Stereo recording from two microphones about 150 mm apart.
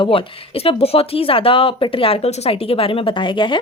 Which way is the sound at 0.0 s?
35° left (ahead or behind).